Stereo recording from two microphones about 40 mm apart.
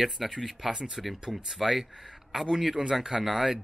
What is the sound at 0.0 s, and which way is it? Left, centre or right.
Speech, centre.